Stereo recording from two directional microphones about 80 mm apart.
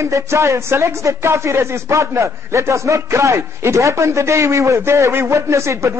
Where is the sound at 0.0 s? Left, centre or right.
Right.